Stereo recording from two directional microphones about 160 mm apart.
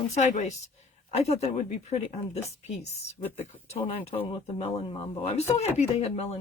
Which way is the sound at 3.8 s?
40° left (ahead or behind).